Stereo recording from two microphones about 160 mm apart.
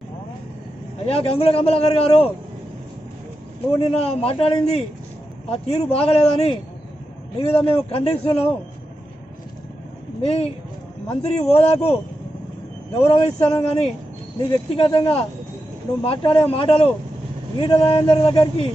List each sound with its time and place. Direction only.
1.0 s a man's voice: 40° left (ahead or behind)
3.8 s a man's voice: 40° left (ahead or behind)
10.2 s a man's voice: 40° left (ahead or behind)
13.0 s a man's voice: 40° left (ahead or behind)